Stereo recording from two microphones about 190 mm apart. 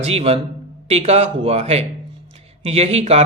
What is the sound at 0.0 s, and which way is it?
Speech, 35° right (ahead or behind).